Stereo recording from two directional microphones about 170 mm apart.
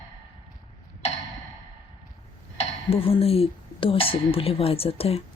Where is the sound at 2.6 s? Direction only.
35° left (ahead or behind).